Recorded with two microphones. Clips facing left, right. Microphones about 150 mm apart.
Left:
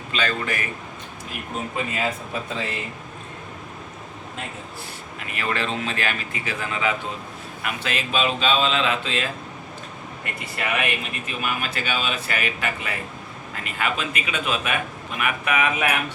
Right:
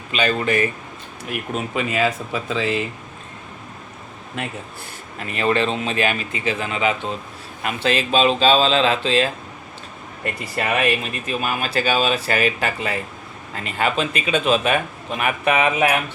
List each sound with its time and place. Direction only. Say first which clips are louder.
0.1 s speech: right 6 dB; 15° right (ahead or behind)
1.3 s speech: right 5 dB; 90° right
4.4 s a man's voice: right 7 dB; 70° right (ahead or behind)
5.2 s speech: right 7 dB; 25° right (ahead or behind)